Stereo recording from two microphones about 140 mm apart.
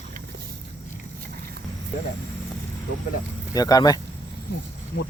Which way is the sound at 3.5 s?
25° left (ahead or behind).